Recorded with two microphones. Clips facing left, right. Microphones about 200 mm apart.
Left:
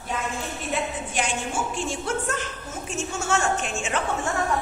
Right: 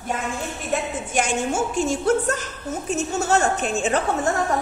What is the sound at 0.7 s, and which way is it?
A woman's voice, 45° right (ahead or behind).